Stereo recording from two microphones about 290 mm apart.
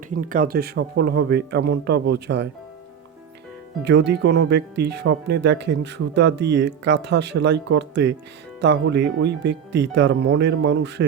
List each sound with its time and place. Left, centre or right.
0.2 s speech: right
3.8 s speech: right